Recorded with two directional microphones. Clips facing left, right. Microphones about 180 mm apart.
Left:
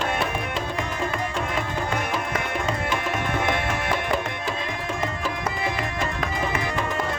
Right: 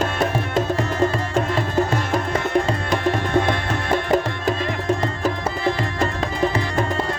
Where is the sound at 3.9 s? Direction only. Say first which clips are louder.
Right 6 dB; 40° right (ahead or behind).